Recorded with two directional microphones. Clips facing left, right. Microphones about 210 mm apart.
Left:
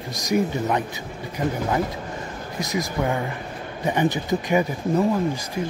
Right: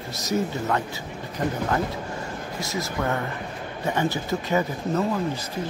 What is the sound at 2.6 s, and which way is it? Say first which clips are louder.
Speech: left 4 dB; 15° left (ahead or behind).